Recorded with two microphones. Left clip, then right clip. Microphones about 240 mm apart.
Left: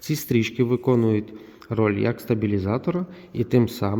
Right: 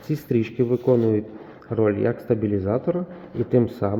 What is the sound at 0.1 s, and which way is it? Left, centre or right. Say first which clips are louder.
Speech: even; left.